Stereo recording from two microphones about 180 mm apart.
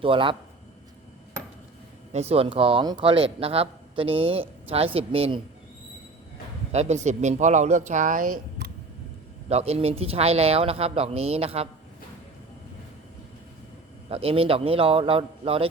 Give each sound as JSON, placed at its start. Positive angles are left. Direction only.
{"t": 0.0, "sound": "a man's voice", "side_deg": -30}
{"t": 2.1, "sound": "a man's voice", "side_deg": -35}
{"t": 6.7, "sound": "a man's voice", "side_deg": -35}
{"t": 9.5, "sound": "a man's voice", "side_deg": -35}
{"t": 14.1, "sound": "a man's voice", "side_deg": -35}